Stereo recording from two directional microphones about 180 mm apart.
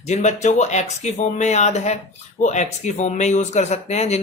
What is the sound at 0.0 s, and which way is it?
Speech, 40° left (ahead or behind).